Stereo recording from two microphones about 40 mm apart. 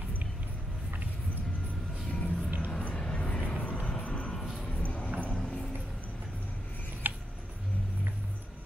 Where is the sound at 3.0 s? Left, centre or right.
Left.